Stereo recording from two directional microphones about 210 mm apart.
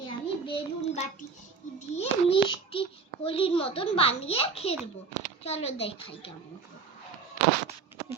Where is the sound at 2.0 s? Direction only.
30° left (ahead or behind).